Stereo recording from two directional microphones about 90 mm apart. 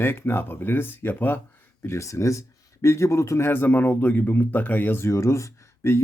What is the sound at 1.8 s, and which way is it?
Speech, 35° left (ahead or behind).